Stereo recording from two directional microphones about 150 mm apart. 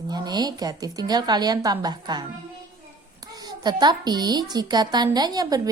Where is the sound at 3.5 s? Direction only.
30° right (ahead or behind).